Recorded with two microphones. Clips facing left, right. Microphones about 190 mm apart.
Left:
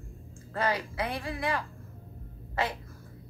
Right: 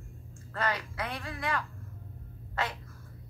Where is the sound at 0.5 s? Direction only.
30° left (ahead or behind).